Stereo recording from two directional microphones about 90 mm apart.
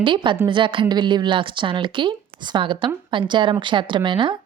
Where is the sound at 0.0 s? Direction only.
65° right (ahead or behind).